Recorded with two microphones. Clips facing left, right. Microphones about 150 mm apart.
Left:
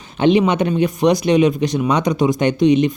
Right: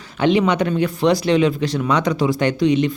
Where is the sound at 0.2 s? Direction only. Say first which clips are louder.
Left 2 dB; 20° left (ahead or behind).